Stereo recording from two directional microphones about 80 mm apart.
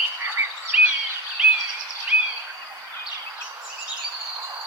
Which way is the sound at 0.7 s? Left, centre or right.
Centre.